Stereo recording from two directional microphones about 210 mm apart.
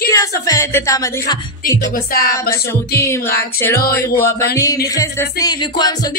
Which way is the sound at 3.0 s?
10° left (ahead or behind).